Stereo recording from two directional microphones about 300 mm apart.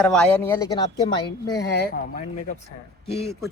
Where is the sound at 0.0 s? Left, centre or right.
Centre.